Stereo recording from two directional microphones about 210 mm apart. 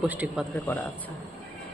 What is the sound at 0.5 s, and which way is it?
Speech, 10° left (ahead or behind).